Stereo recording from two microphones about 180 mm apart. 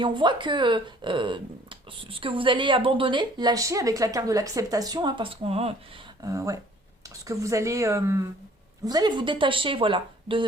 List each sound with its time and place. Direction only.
0.0 s speech: 25° right (ahead or behind)
6.2 s speech: 15° right (ahead or behind)